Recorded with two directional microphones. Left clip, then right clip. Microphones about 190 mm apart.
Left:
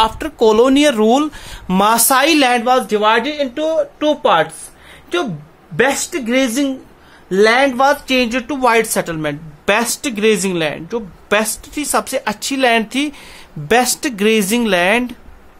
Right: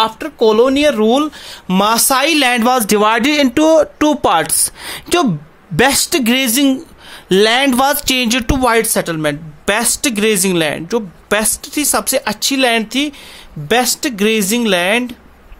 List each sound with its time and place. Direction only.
0.0 s speech: 10° left (ahead or behind); by 2.3 s 10° right (ahead or behind)
2.3 s speech: 30° right (ahead or behind)
2.6 s speech: 50° right (ahead or behind); by 8.5 s 30° right (ahead or behind)
8.5 s speech: 10° right (ahead or behind)